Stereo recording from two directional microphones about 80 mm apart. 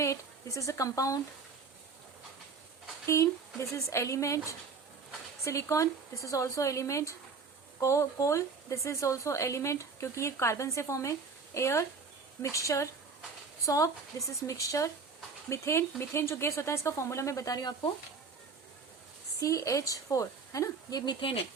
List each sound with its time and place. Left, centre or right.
0.0 s speech: left
3.1 s a woman's voice: left
19.4 s a woman's voice: left
21.0 s speech: left